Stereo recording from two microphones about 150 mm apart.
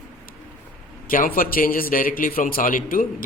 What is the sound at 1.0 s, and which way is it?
A man's voice, 70° left (ahead or behind).